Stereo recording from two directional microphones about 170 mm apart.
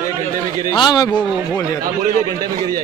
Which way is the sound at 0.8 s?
25° left (ahead or behind).